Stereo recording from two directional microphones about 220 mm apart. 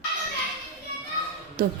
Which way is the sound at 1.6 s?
40° right (ahead or behind).